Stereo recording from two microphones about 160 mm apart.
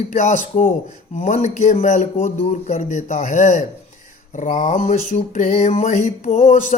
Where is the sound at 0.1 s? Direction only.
50° left (ahead or behind).